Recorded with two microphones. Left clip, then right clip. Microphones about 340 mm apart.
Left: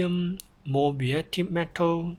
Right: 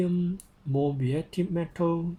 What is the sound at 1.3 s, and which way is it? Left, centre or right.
Speech, left.